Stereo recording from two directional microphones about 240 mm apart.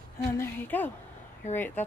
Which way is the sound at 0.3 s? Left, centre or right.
Centre.